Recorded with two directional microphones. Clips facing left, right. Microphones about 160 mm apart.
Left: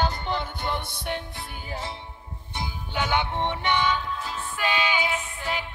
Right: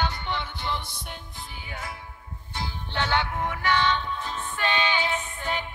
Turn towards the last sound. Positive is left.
turn(degrees=5)  # may be behind; listen again after turning